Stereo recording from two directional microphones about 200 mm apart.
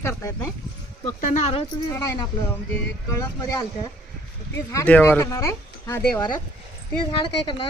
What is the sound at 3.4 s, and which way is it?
Speech, 15° left (ahead or behind).